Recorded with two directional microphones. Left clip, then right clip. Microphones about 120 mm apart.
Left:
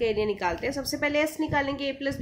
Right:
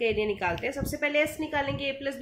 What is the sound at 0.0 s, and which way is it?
A woman's voice, 35° left (ahead or behind).